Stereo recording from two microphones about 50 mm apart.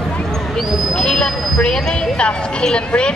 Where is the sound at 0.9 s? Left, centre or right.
Centre.